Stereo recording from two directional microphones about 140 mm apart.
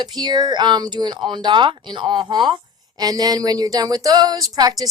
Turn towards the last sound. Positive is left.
turn(degrees=-25)  # may be behind; listen again after turning